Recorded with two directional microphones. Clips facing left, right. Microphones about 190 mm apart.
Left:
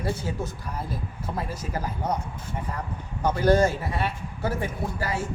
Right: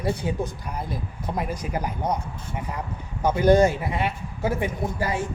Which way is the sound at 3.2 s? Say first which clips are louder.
Right 3 dB; 15° right (ahead or behind).